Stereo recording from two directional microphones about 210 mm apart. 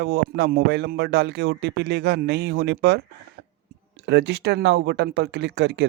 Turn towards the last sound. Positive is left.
turn(degrees=-55)  # may be behind; listen again after turning